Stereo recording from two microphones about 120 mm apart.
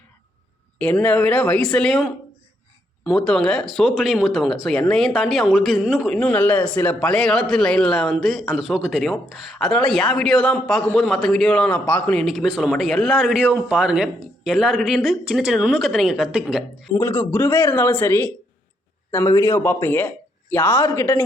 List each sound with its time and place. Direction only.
0.8 s speech: 10° left (ahead or behind)
3.2 s speech: 5° left (ahead or behind)
12.2 s speech: centre (ahead or behind)
16.9 s speech: 20° left (ahead or behind)
19.1 s speech: 25° left (ahead or behind)